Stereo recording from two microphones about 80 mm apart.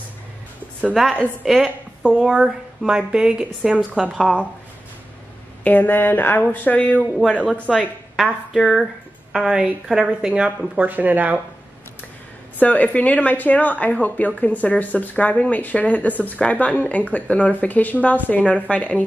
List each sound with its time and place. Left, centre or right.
1.4 s a woman's voice: centre
4.1 s a woman's voice: centre
5.6 s speech: left
8.2 s a woman's voice: centre
12.5 s speech: centre